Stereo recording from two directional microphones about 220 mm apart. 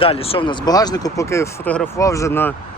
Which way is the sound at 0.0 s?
25° left (ahead or behind).